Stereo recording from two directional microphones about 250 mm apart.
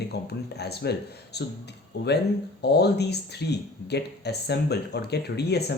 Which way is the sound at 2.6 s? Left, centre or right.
Left.